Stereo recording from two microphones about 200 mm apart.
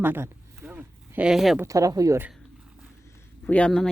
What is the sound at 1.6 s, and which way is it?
Speech, 15° right (ahead or behind).